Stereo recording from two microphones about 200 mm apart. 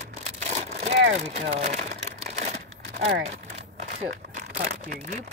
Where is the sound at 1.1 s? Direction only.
30° right (ahead or behind).